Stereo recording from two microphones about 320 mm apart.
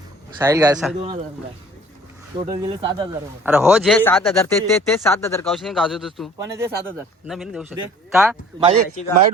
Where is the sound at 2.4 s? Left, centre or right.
Centre.